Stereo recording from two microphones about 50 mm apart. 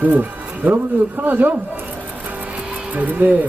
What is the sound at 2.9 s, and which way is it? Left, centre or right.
Speech, right.